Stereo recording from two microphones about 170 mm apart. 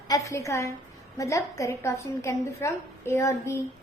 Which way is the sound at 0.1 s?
20° left (ahead or behind).